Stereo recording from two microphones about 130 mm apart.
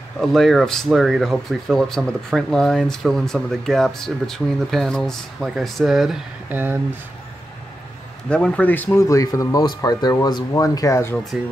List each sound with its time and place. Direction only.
0.2 s speech: centre (ahead or behind)
6.5 s speech: 15° right (ahead or behind)
8.3 s speech: 5° left (ahead or behind)
9.0 s speech: 25° left (ahead or behind)